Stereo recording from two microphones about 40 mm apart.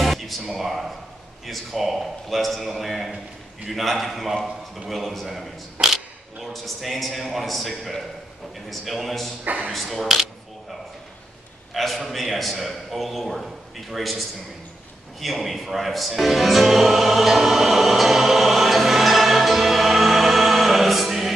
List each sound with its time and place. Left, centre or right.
0.0 s a sound: centre
0.6 s speech: centre
9.4 s speech: right
9.7 s speech: centre
11.7 s speech: centre
15.1 s music: centre